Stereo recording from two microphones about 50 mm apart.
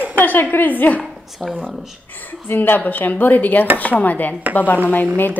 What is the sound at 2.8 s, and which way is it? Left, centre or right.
Speech, left.